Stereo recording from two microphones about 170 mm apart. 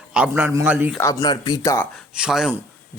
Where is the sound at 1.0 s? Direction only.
20° left (ahead or behind).